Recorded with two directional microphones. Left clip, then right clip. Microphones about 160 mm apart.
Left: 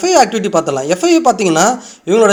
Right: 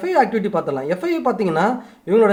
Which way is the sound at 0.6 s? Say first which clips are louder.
Left 8 dB; 20° left (ahead or behind).